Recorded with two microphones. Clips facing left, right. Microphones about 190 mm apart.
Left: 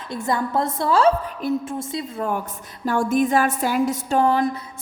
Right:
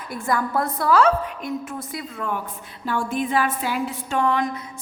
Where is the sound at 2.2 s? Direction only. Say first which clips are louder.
Left 2 dB; 40° left (ahead or behind).